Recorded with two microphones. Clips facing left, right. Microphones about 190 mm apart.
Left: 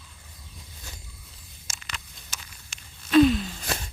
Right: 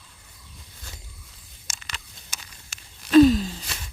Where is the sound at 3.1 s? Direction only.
40° right (ahead or behind).